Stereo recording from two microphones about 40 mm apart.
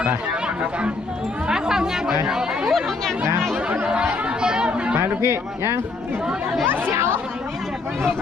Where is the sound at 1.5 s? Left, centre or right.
Centre.